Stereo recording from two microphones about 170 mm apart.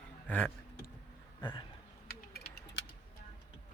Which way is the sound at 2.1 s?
80° left.